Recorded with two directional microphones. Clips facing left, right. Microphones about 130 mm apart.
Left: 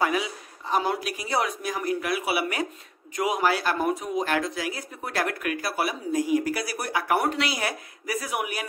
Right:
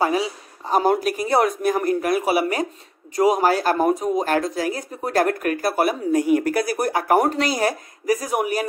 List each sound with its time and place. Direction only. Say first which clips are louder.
0.0 s speech: right 5 dB; 35° right (ahead or behind)